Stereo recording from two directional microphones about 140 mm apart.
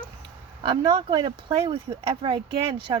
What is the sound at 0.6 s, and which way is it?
Speech, 35° right (ahead or behind).